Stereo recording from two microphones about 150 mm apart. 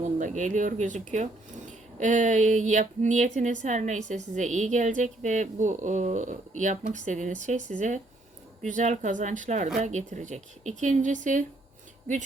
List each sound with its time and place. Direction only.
0.0 s speech: 55° right (ahead or behind)